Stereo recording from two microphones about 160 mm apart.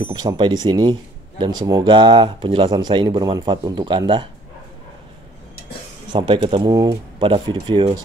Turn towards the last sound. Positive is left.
turn(degrees=-30)  # may be behind; listen again after turning